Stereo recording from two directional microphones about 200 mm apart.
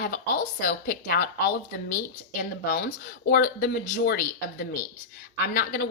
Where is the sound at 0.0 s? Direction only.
45° left (ahead or behind).